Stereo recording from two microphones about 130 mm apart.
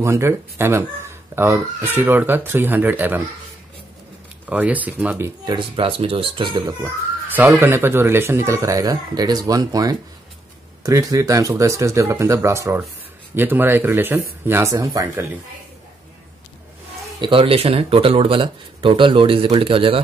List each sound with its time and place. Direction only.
0.0 s speech: 20° right (ahead or behind)
4.5 s speech: 10° right (ahead or behind)
5.5 s speech: 40° right (ahead or behind)
7.3 s speech: 15° right (ahead or behind)
17.2 s speech: 45° right (ahead or behind)